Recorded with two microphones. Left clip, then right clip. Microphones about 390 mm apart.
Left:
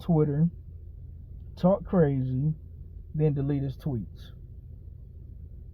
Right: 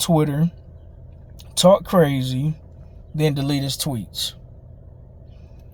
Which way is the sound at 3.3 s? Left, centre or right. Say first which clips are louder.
Right 8 dB; centre.